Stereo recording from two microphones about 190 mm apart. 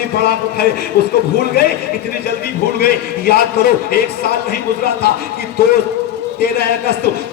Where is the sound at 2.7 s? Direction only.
55° left (ahead or behind).